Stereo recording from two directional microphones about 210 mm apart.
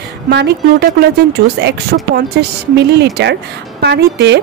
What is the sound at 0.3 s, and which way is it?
Speech, 50° right (ahead or behind).